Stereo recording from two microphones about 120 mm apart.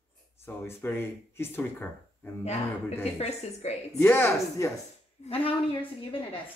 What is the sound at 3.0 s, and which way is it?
Speech, 60° left (ahead or behind).